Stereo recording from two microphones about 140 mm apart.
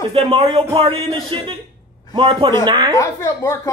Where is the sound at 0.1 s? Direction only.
40° right (ahead or behind).